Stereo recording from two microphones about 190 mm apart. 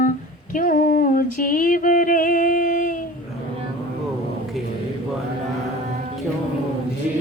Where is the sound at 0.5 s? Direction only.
45° left (ahead or behind).